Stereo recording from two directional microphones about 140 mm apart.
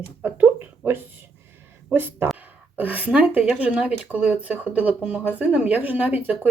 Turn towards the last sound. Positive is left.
turn(degrees=-10)  # may be behind; listen again after turning